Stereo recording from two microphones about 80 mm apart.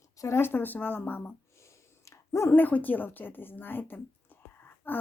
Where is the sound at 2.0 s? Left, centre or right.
Left.